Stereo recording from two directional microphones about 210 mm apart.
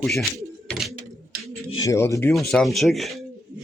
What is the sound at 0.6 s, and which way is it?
Bird, centre (ahead or behind).